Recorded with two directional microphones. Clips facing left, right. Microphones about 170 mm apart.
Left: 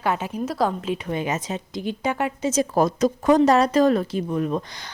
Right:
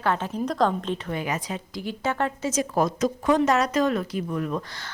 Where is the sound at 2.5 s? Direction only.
30° left (ahead or behind).